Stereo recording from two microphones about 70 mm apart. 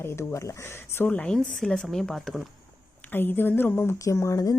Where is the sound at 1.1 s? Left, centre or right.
Centre.